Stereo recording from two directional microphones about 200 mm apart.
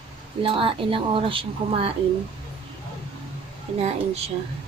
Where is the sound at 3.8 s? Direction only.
30° right (ahead or behind).